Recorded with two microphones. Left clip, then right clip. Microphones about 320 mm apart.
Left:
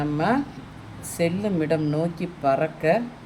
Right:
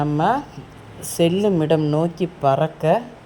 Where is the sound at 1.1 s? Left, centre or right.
Right.